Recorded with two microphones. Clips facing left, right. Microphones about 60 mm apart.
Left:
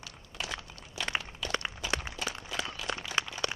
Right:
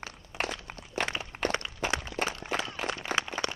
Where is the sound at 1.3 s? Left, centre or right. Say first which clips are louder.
Right 8 dB; right.